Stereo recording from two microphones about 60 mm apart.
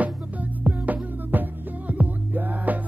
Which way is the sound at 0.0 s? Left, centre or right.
Right.